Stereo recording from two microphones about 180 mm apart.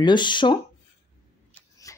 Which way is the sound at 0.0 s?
25° left (ahead or behind).